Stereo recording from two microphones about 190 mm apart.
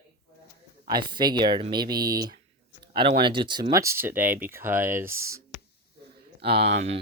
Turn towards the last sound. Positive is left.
turn(degrees=-35)  # may be behind; listen again after turning